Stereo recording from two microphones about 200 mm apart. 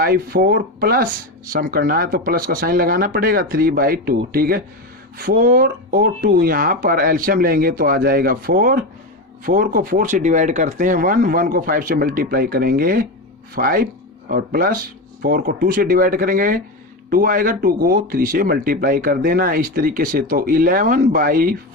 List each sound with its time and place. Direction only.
0.0 s speech: 50° right (ahead or behind)